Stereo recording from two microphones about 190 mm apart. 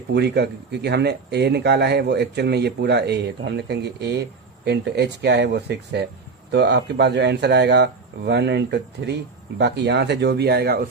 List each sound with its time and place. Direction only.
0.1 s speech: 60° right (ahead or behind)